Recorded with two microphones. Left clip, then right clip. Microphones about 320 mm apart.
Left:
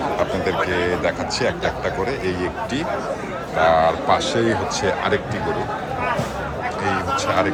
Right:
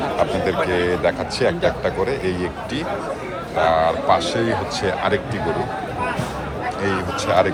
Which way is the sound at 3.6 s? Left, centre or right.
Centre.